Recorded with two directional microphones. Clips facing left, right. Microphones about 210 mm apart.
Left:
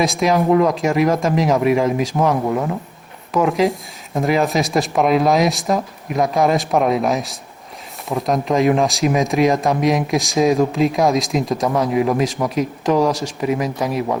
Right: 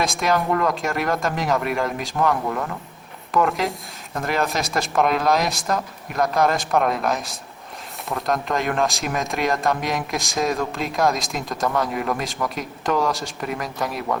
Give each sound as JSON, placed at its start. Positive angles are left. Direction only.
{"t": 0.0, "sound": "speech", "side_deg": 0}
{"t": 2.3, "sound": "speech", "side_deg": 20}
{"t": 3.3, "sound": "speech", "side_deg": 0}